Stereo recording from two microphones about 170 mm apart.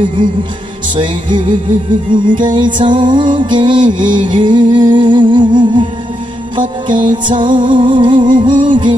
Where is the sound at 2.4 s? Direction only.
30° right (ahead or behind).